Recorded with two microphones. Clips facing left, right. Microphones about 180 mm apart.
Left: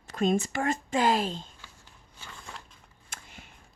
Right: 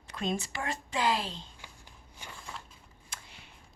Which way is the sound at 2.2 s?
15° right (ahead or behind).